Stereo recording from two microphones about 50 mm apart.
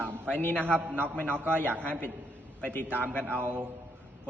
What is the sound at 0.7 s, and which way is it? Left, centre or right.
A man's voice, right.